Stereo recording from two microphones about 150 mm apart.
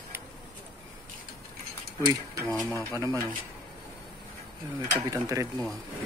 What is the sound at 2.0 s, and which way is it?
Speech, 20° right (ahead or behind).